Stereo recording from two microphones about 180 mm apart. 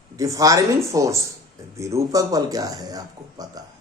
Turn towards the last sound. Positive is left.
turn(degrees=-20)  # may be behind; listen again after turning